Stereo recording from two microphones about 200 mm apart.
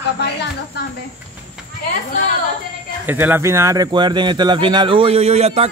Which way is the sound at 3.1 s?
10° right (ahead or behind).